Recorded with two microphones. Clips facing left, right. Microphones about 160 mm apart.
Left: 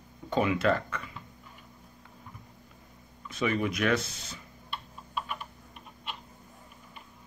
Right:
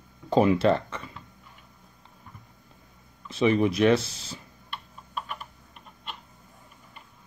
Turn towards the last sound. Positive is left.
turn(degrees=0)  # may be behind; listen again after turning